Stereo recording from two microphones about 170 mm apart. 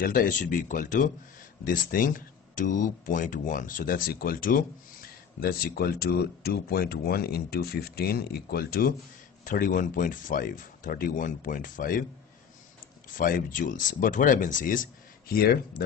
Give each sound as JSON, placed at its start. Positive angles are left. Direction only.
{"t": 0.0, "sound": "speech", "side_deg": 55}
{"t": 9.4, "sound": "speech", "side_deg": 50}
{"t": 13.2, "sound": "speech", "side_deg": 55}